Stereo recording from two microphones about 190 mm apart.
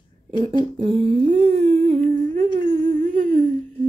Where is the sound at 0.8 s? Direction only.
30° right (ahead or behind).